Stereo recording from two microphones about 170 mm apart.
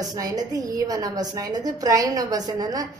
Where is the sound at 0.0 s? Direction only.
20° right (ahead or behind).